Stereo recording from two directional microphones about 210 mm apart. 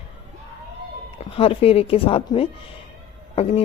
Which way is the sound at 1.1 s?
25° left (ahead or behind).